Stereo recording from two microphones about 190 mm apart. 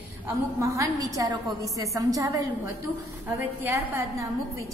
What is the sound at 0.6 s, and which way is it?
A woman's voice, 15° right (ahead or behind).